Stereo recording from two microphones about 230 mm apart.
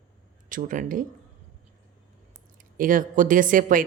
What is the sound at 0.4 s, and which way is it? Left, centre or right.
Speech, right.